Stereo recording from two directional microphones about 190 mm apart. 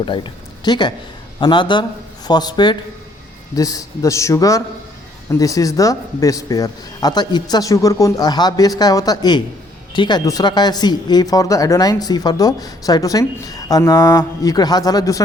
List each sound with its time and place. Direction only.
0.0 s a man's voice: 25° left (ahead or behind)